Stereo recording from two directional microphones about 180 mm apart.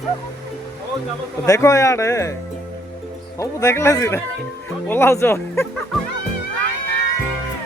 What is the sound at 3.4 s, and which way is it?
Speech, 15° left (ahead or behind).